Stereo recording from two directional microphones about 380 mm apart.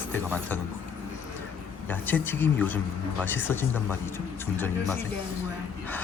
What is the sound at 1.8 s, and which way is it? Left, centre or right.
Speech, centre.